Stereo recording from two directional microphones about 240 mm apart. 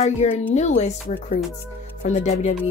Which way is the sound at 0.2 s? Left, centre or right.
Left.